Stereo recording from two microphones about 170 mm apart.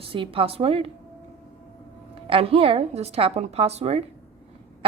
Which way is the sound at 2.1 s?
35° right (ahead or behind).